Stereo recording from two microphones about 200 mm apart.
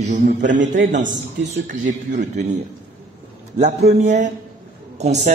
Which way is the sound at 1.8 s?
35° right (ahead or behind).